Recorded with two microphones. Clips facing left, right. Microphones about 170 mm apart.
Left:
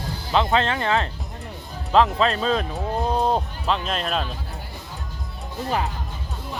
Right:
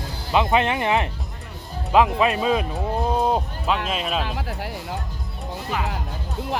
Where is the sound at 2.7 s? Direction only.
Centre (ahead or behind).